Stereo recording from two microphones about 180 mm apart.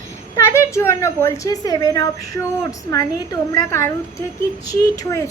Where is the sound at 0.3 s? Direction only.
15° left (ahead or behind).